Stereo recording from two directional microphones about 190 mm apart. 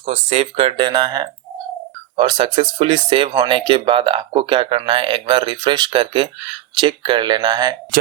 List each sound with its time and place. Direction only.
0.0 s speech: 35° right (ahead or behind)